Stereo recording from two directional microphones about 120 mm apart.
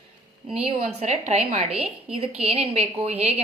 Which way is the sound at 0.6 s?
60° right (ahead or behind).